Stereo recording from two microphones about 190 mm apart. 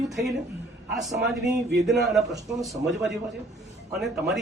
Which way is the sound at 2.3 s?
20° right (ahead or behind).